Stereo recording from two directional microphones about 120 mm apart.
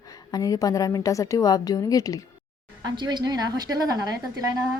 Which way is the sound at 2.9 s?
35° right (ahead or behind).